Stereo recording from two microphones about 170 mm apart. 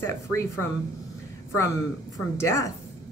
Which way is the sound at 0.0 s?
15° left (ahead or behind).